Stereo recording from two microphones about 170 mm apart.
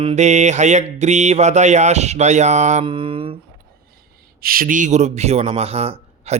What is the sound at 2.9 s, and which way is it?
Speech, 30° right (ahead or behind).